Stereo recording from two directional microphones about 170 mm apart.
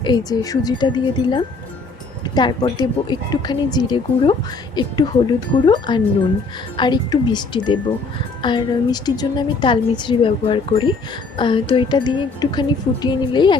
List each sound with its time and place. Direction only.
0.0 s speech: 25° left (ahead or behind)